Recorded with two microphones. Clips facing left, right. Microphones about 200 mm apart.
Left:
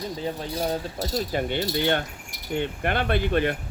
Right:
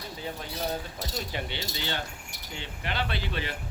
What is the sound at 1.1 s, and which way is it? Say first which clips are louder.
Speech: left 9 dB; 45° left (ahead or behind).